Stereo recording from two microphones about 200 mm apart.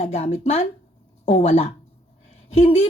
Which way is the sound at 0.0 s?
30° left (ahead or behind).